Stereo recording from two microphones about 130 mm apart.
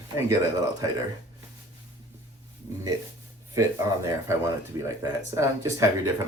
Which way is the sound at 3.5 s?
25° right (ahead or behind).